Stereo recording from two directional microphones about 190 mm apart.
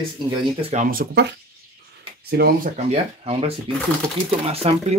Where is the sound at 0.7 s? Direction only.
45° right (ahead or behind).